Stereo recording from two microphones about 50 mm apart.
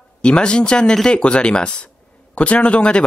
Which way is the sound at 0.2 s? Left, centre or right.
Centre.